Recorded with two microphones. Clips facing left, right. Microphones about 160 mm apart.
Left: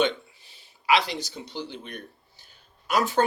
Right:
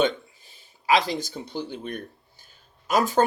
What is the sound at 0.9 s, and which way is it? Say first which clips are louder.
Speech: right 2 dB; 45° right (ahead or behind).